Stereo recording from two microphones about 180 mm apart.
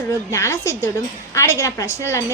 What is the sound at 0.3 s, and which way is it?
A woman's voice, 15° left (ahead or behind).